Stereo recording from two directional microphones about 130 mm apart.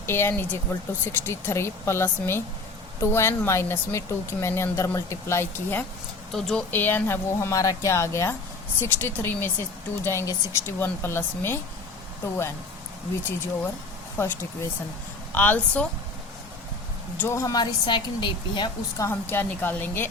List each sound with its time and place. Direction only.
0.0 s speech: 20° left (ahead or behind)
6.3 s speech: 5° left (ahead or behind)
14.2 s speech: 20° left (ahead or behind)
17.2 s speech: 20° left (ahead or behind); by 18.7 s 35° left (ahead or behind)
18.9 s speech: 20° left (ahead or behind)